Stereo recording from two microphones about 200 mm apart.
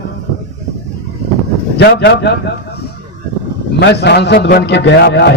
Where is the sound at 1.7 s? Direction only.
55° left (ahead or behind).